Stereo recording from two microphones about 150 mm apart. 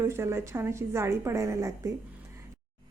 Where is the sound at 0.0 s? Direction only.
15° right (ahead or behind).